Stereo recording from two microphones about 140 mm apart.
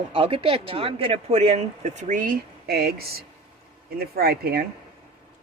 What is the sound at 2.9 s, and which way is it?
Speech, 90° right.